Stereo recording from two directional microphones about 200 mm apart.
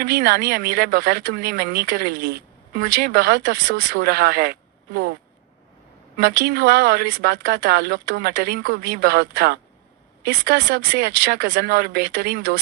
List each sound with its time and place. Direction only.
0.0 s speech: 55° right (ahead or behind)
6.1 s speech: 50° right (ahead or behind)